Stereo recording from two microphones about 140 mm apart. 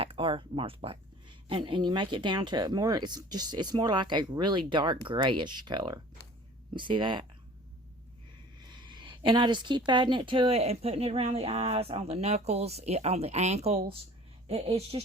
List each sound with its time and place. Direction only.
0.0 s speech: 40° right (ahead or behind)
8.6 s speech: 35° right (ahead or behind)